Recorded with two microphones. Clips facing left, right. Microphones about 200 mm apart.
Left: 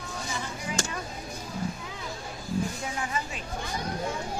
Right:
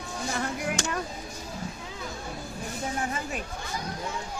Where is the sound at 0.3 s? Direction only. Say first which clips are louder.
Right 6 dB; 65° right (ahead or behind).